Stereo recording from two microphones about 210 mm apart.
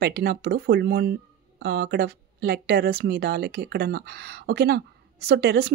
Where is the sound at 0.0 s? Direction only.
50° right (ahead or behind).